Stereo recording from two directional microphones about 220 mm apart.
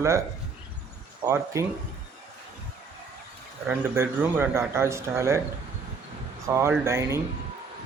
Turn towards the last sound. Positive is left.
turn(degrees=-15)  # may be behind; listen again after turning